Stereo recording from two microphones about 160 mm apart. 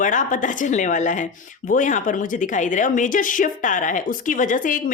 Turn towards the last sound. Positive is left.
turn(degrees=55)  # may be behind; listen again after turning